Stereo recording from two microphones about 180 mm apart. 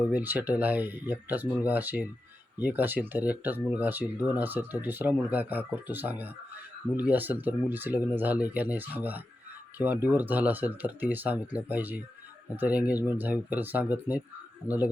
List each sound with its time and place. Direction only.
0.1 s speech: 10° right (ahead or behind)